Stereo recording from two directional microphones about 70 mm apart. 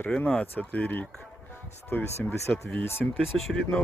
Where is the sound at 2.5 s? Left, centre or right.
Centre.